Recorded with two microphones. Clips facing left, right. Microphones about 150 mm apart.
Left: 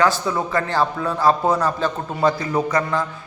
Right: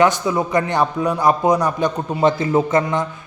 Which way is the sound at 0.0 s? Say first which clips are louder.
Right 3 dB; 15° right (ahead or behind).